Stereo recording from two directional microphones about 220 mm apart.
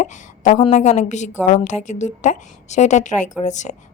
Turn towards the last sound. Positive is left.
turn(degrees=35)  # may be behind; listen again after turning